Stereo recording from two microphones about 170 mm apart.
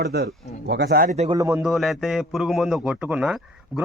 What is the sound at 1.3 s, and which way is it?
Speech, 20° right (ahead or behind).